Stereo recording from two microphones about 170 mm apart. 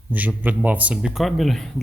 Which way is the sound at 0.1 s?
10° right (ahead or behind).